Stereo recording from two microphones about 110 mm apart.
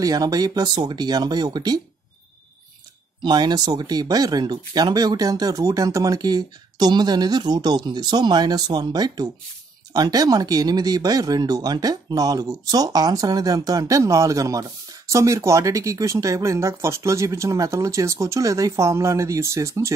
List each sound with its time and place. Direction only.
0.0 s speech: 35° right (ahead or behind)
3.2 s speech: 40° right (ahead or behind)